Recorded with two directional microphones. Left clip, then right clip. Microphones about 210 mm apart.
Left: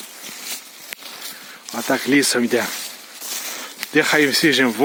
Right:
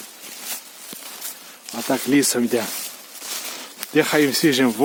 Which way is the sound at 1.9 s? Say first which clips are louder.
Left 2 dB; 5° right (ahead or behind).